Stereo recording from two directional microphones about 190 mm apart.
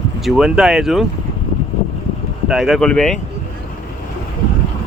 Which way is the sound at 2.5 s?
Centre (ahead or behind).